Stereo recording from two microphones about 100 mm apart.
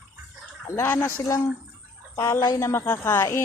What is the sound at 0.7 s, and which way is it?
A woman's voice, 25° left (ahead or behind).